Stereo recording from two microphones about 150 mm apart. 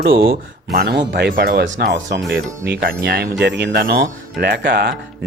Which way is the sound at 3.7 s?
90° right.